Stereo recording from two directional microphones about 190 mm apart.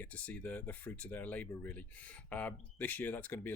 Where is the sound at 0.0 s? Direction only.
5° left (ahead or behind).